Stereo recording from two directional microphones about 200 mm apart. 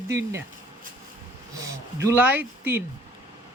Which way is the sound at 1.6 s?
15° right (ahead or behind).